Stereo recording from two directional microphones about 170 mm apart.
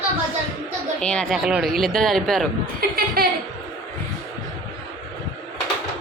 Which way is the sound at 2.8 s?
60° right (ahead or behind).